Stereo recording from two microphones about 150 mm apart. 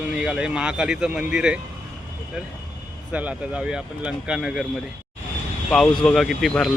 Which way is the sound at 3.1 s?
10° right (ahead or behind).